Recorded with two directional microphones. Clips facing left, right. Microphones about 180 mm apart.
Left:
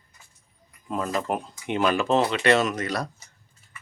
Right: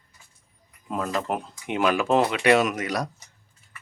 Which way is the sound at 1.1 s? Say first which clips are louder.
Even; centre (ahead or behind).